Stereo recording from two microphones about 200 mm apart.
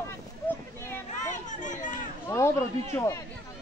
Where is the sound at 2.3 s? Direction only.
15° left (ahead or behind).